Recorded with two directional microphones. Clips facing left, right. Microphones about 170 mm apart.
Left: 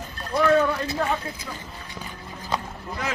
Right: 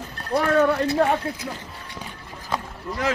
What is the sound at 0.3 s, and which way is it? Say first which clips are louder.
Speech: right 1 dB; 55° right (ahead or behind).